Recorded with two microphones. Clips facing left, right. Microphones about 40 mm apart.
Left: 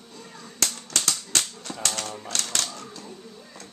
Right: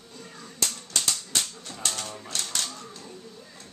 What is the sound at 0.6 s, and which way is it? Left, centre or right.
Typewriter, left.